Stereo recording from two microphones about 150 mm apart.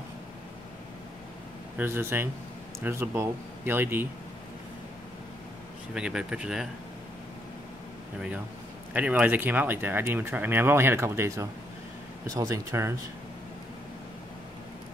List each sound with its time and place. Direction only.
1.8 s speech: 15° right (ahead or behind)
5.9 s speech: 5° right (ahead or behind)
8.9 s speech: 10° right (ahead or behind)